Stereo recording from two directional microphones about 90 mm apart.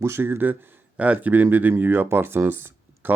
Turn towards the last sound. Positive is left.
turn(degrees=-25)  # may be behind; listen again after turning